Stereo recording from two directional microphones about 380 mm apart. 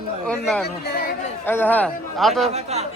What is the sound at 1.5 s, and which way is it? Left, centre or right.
Speech, centre.